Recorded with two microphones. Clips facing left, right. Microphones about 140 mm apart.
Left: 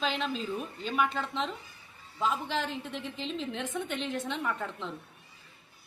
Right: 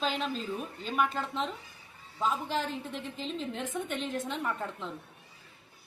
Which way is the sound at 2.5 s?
45° right (ahead or behind).